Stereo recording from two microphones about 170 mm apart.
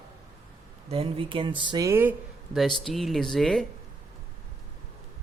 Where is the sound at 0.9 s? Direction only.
35° right (ahead or behind); by 2.2 s 15° right (ahead or behind).